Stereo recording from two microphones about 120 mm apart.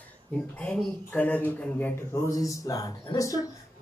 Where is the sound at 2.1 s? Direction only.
30° left (ahead or behind).